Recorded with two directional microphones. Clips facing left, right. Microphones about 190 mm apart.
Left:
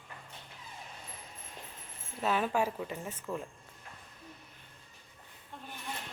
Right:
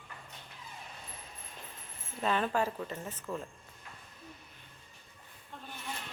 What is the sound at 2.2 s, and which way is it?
Speech, 5° left (ahead or behind).